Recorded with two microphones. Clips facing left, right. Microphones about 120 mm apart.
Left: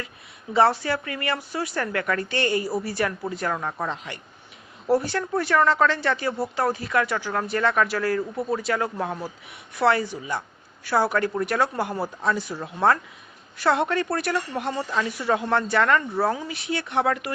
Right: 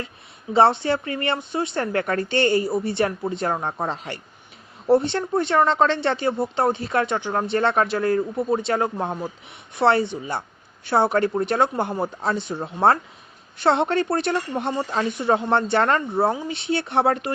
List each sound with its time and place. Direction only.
0.5 s speech: 25° right (ahead or behind)